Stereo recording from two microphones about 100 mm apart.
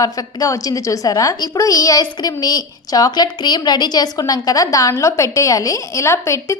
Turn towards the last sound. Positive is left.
turn(degrees=30)  # may be behind; listen again after turning